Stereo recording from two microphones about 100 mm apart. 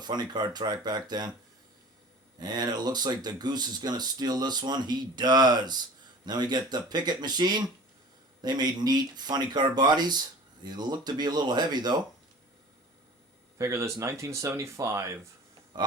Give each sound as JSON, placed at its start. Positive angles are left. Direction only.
{"t": 0.0, "sound": "speech", "side_deg": -45}
{"t": 2.4, "sound": "speech", "side_deg": -45}
{"t": 13.6, "sound": "speech", "side_deg": -30}
{"t": 15.7, "sound": "a sound", "side_deg": -45}